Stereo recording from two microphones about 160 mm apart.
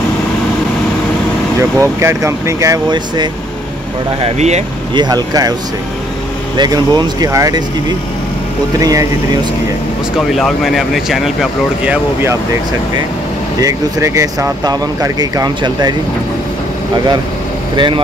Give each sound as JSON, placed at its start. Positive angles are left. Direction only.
{"t": 1.6, "sound": "speech", "side_deg": -15}
{"t": 4.2, "sound": "speech", "side_deg": -45}
{"t": 4.9, "sound": "speech", "side_deg": -25}
{"t": 6.5, "sound": "speech", "side_deg": -25}
{"t": 8.7, "sound": "speech", "side_deg": -20}
{"t": 10.3, "sound": "speech", "side_deg": 0}
{"t": 11.8, "sound": "speech", "side_deg": -10}
{"t": 13.6, "sound": "speech", "side_deg": -20}
{"t": 17.7, "sound": "speech", "side_deg": -30}